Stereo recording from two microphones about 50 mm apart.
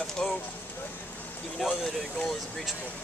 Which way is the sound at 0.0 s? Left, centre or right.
Centre.